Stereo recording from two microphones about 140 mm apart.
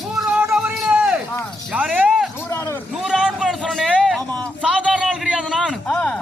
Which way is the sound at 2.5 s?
20° left (ahead or behind).